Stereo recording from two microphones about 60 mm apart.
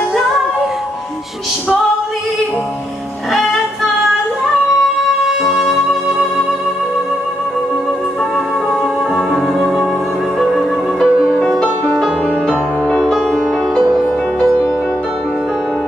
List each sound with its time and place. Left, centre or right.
5.4 s music: centre
9.1 s music: centre
12.8 s music: centre